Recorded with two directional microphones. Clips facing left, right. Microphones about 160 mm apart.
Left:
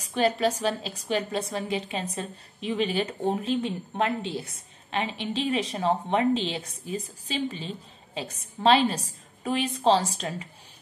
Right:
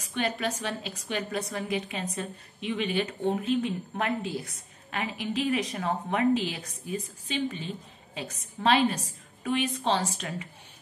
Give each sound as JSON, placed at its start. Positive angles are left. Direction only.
{"t": 0.0, "sound": "a woman's voice", "side_deg": 35}